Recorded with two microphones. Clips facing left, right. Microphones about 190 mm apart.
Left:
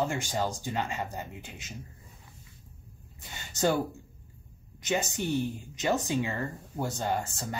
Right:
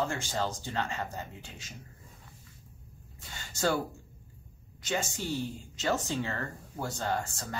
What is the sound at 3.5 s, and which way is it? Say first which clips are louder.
Speech: left 2 dB; 20° left (ahead or behind).